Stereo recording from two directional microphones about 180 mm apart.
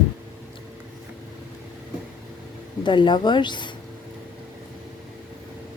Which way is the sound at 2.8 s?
25° left (ahead or behind).